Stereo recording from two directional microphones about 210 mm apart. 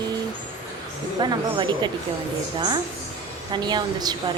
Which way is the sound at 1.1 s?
20° right (ahead or behind).